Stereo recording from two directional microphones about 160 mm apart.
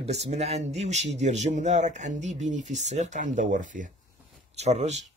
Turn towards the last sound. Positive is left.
turn(degrees=-45)  # may be behind; listen again after turning